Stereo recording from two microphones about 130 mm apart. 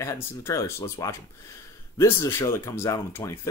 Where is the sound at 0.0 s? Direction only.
20° left (ahead or behind).